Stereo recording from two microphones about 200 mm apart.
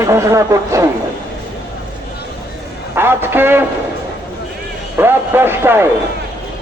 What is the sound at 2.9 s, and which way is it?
Speech, 10° right (ahead or behind).